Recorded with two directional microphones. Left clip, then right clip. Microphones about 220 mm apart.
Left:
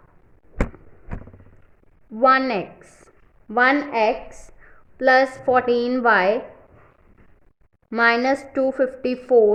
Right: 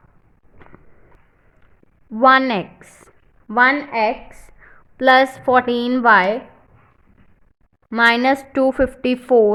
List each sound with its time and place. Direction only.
2.1 s a woman's voice: 25° right (ahead or behind)
3.5 s a woman's voice: 15° right (ahead or behind)
4.9 s a woman's voice: 25° right (ahead or behind)
7.9 s a woman's voice: 20° right (ahead or behind)